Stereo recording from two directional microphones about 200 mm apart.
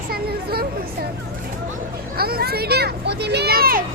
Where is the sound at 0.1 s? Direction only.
50° right (ahead or behind).